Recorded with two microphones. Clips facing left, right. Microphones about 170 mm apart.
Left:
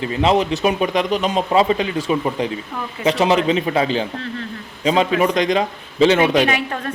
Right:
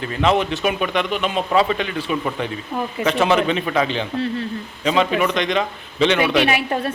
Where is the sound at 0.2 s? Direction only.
35° left (ahead or behind).